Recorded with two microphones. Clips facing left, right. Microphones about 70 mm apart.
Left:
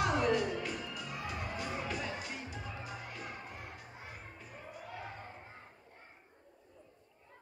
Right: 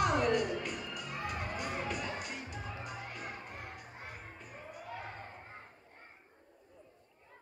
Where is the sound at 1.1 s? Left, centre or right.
Right.